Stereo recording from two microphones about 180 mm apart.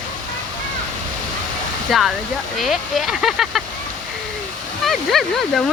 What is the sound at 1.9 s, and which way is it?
Speech, centre (ahead or behind).